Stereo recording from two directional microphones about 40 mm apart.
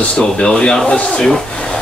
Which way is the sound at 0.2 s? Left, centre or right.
Left.